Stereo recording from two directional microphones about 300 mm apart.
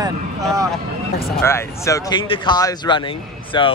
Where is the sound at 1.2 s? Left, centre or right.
Centre.